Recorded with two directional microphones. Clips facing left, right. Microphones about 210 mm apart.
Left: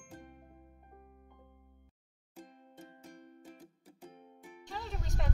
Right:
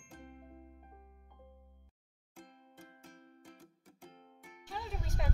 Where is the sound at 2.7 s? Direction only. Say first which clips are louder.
Left 4 dB; 20° left (ahead or behind).